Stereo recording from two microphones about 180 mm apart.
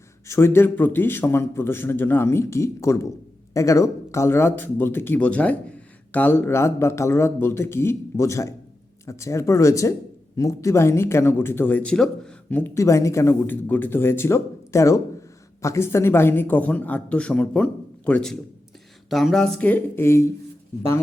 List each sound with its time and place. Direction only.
0.3 s speech: 15° left (ahead or behind)